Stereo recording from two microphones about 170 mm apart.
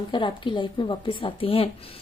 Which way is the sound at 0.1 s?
30° left (ahead or behind).